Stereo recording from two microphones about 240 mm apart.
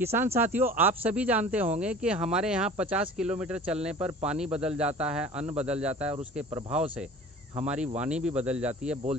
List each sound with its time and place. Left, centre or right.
0.0 s speech: centre
5.4 s speech: right
5.7 s speech: centre
7.6 s speech: centre